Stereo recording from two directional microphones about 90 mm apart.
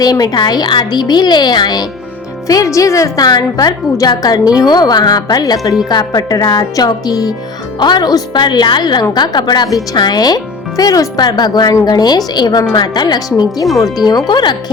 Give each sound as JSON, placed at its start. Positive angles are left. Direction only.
{"t": 0.0, "sound": "a woman's voice", "side_deg": 45}
{"t": 2.5, "sound": "a woman's voice", "side_deg": 40}